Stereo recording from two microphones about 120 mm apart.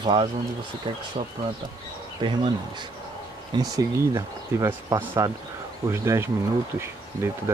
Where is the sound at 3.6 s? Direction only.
25° right (ahead or behind).